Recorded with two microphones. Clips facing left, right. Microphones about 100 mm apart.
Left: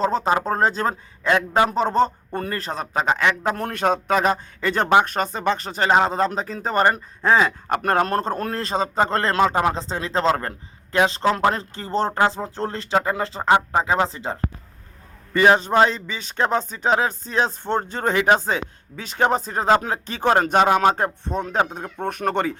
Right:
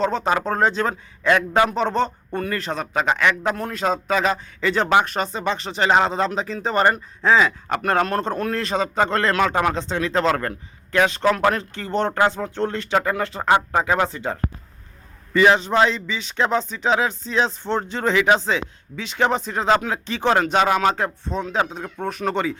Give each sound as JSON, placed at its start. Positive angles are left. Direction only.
{"t": 0.0, "sound": "a man's voice", "side_deg": 35}
{"t": 3.6, "sound": "a man's voice", "side_deg": 55}
{"t": 15.3, "sound": "a man's voice", "side_deg": 40}